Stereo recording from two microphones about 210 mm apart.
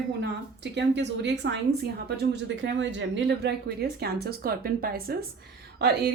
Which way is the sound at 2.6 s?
60° right (ahead or behind).